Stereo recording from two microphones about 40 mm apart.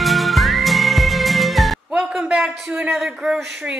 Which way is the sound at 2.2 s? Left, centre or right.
Right.